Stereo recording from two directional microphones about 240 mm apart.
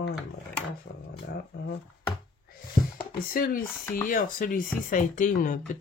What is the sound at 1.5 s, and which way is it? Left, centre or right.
Speech, left.